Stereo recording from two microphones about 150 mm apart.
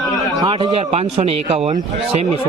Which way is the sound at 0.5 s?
40° right (ahead or behind).